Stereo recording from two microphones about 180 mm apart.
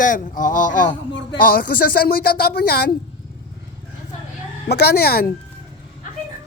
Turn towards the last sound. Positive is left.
turn(degrees=60)  # may be behind; listen again after turning